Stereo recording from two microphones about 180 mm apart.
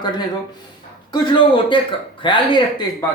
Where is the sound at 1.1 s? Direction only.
25° left (ahead or behind).